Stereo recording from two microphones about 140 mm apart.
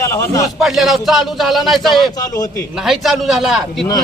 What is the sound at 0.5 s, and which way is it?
Speech, centre (ahead or behind).